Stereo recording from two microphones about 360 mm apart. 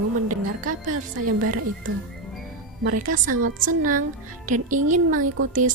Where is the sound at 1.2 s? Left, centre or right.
Right.